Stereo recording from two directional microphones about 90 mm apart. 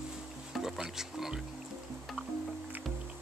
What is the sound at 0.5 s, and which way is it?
Music, 5° right (ahead or behind).